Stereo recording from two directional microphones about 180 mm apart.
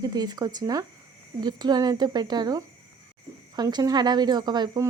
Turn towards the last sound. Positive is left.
turn(degrees=-25)  # may be behind; listen again after turning